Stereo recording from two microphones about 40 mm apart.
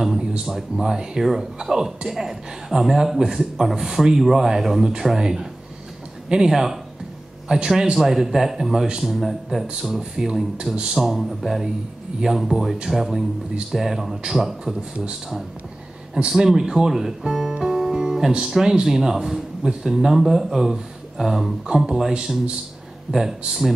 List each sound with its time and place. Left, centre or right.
0.5 s a man's voice: centre
9.1 s a man's voice: centre
16.3 s a man's voice: centre